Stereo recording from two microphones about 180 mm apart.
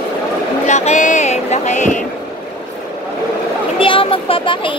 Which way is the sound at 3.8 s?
30° left (ahead or behind).